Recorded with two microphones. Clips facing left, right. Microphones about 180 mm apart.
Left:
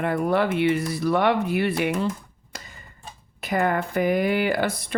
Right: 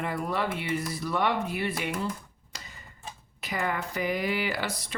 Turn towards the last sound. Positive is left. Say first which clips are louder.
# left 8 dB
turn(degrees=55)  # may be behind; listen again after turning